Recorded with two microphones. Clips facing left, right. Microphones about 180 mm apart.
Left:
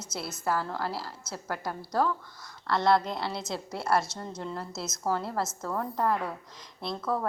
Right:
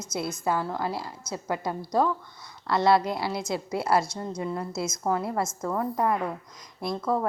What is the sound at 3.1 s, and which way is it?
A woman's voice, 5° right (ahead or behind).